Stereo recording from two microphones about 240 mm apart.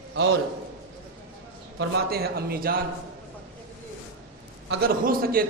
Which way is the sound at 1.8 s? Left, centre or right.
Right.